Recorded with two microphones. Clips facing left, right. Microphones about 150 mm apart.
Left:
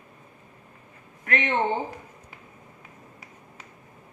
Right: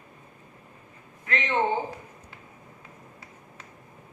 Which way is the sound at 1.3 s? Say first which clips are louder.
Left 3 dB; 60° left (ahead or behind).